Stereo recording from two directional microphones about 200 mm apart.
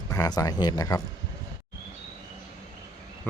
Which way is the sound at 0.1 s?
15° left (ahead or behind).